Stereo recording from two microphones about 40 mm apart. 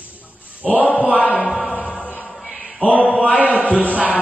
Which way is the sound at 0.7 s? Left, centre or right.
Left.